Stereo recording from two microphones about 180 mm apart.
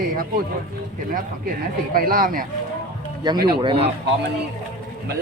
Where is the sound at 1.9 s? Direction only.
55° right (ahead or behind).